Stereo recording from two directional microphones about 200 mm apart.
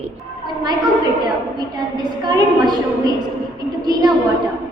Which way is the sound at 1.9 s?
20° right (ahead or behind).